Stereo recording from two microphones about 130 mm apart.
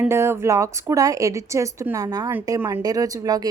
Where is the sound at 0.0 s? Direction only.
20° right (ahead or behind).